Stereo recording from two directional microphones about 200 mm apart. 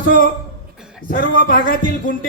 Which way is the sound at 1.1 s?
45° left (ahead or behind).